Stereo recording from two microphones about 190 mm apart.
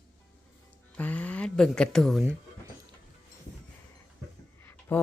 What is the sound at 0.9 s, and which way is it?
Speech, 10° left (ahead or behind).